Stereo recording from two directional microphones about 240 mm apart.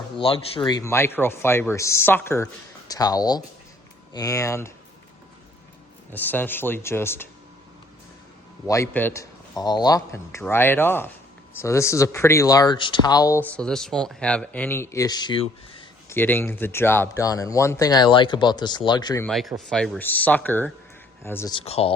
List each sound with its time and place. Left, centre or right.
0.2 s speech: left
6.1 s speech: centre
8.6 s speech: centre
16.0 s speech: centre
19.3 s speech: centre
21.6 s speech: left